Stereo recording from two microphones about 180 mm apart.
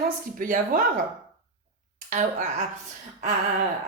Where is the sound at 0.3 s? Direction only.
50° right (ahead or behind).